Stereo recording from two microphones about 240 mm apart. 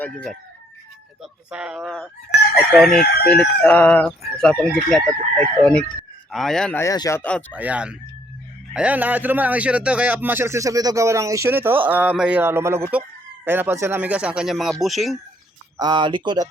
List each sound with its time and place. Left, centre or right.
0.0 s speech: centre
7.5 s a man's voice: centre
15.8 s speech: centre